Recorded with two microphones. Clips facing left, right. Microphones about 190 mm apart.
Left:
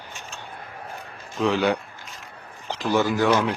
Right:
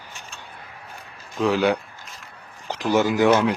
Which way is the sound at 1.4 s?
Centre (ahead or behind).